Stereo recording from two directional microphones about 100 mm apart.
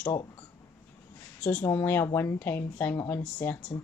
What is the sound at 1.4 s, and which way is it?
Speech, 20° left (ahead or behind).